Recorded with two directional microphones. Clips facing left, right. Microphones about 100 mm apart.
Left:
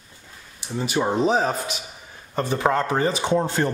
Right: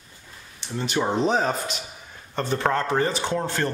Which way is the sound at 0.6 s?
10° left (ahead or behind).